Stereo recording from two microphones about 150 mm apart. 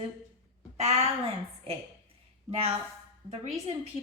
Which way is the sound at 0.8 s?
45° right (ahead or behind).